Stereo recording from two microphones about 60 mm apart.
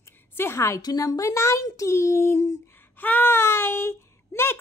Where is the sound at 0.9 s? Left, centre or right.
Left.